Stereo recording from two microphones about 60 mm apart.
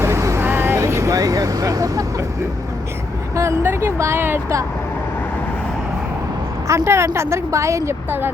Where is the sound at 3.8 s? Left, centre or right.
Right.